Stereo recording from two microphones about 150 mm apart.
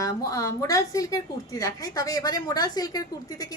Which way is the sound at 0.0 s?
25° left (ahead or behind).